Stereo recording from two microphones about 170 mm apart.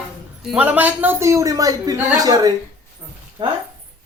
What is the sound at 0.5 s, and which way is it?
A woman's voice, 10° right (ahead or behind).